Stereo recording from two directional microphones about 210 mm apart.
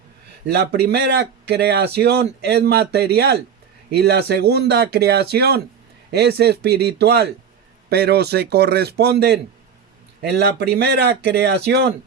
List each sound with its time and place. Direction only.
0.4 s speech: 50° right (ahead or behind)